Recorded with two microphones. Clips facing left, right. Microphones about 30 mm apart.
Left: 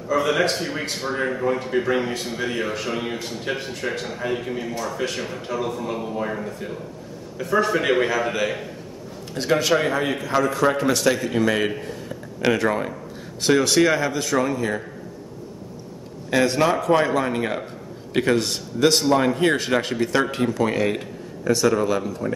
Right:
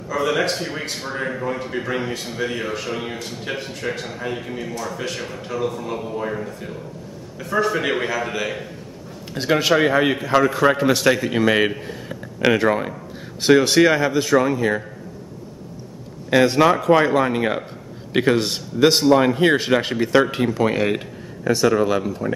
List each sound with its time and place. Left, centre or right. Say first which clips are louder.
0.1 s speech: left 1 dB; centre
9.3 s a man's voice: right 2 dB; centre
16.3 s a man's voice: right 4 dB; centre